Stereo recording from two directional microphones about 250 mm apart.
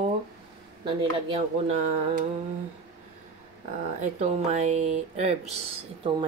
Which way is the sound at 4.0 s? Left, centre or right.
Right.